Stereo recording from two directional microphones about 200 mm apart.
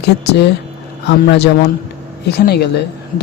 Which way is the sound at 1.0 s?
60° left (ahead or behind).